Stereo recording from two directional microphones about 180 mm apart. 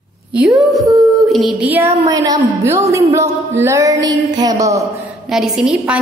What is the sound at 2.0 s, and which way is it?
A woman's voice, 20° right (ahead or behind).